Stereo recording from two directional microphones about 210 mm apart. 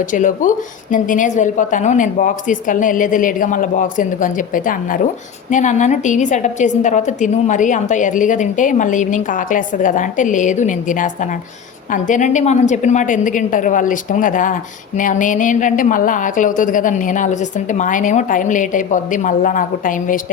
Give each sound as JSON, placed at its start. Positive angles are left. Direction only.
{"t": 0.0, "sound": "a woman's voice", "side_deg": 40}